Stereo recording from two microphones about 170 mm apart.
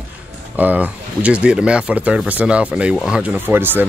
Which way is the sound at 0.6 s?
10° right (ahead or behind).